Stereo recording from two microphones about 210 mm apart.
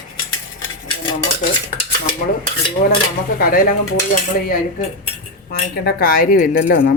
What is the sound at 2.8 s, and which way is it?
Speech, 30° left (ahead or behind).